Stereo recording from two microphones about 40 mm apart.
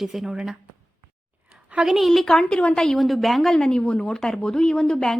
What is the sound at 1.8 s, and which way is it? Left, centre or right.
Speech, centre.